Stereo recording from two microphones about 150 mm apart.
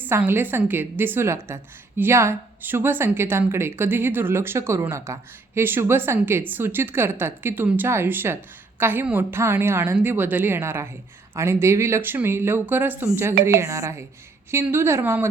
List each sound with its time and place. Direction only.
0.0 s a woman's voice: 15° right (ahead or behind)